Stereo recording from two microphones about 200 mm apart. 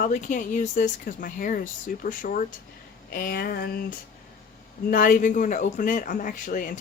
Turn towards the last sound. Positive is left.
turn(degrees=40)  # may be behind; listen again after turning